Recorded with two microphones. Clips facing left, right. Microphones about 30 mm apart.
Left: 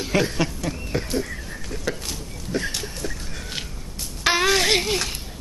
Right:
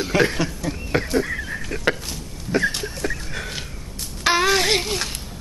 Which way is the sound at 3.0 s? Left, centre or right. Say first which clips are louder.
Right 9 dB; right.